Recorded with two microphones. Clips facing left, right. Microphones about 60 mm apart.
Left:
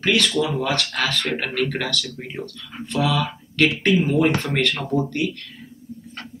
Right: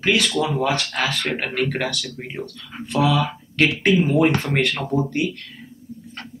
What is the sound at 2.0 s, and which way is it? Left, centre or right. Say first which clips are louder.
Speech: right 1 dB; right.